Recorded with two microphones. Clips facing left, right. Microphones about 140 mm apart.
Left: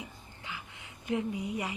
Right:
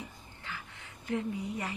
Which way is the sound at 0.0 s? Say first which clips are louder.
Even; 15° left (ahead or behind).